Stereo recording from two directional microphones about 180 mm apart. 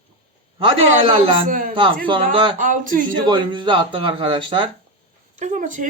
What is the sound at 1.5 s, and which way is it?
Speech, 50° right (ahead or behind).